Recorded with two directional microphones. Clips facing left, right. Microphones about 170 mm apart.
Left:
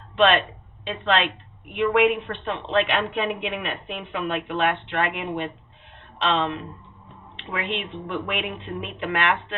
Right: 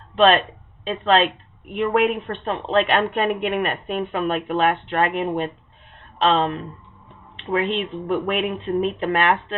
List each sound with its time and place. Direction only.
0.9 s a woman's voice: 40° right (ahead or behind)